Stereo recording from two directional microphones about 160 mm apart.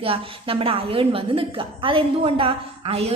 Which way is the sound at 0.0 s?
35° right (ahead or behind).